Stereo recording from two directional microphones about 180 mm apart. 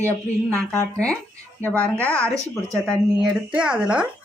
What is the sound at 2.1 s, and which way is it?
Speech, 15° right (ahead or behind).